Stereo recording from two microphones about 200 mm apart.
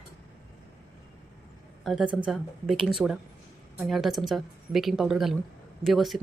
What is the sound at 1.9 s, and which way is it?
A woman's voice, centre (ahead or behind).